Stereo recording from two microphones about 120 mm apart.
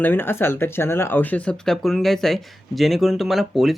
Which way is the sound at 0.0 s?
15° left (ahead or behind).